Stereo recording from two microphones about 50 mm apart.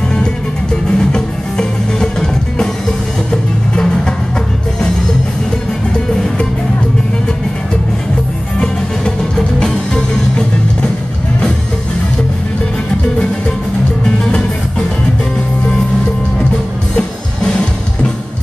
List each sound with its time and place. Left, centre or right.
0.9 s music: centre